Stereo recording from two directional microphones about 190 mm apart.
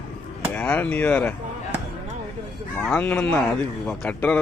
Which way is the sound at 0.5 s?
10° left (ahead or behind).